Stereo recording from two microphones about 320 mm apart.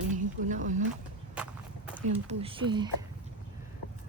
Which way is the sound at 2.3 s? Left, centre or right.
Centre.